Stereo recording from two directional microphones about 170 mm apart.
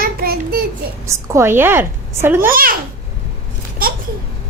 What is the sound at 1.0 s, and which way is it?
A woman's voice, 15° right (ahead or behind).